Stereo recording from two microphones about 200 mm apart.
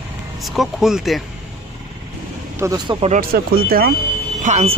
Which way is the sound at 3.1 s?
45° right (ahead or behind).